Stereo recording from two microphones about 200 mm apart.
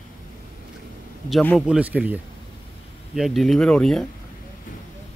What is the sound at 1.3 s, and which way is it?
Speech, 5° left (ahead or behind).